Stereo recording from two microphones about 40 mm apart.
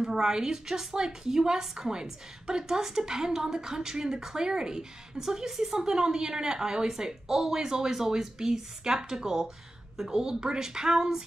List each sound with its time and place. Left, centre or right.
0.0 s a woman's voice: centre